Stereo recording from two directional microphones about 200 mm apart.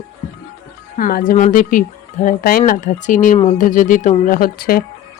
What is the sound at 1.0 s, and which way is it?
Speech, 45° left (ahead or behind).